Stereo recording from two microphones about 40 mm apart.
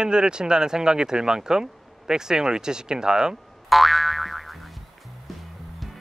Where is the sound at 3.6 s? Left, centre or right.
Centre.